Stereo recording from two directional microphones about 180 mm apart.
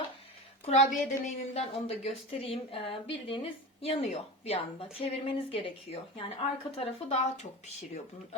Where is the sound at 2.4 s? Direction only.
30° left (ahead or behind).